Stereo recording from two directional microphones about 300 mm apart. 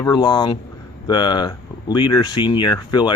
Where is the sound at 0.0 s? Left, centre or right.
Centre.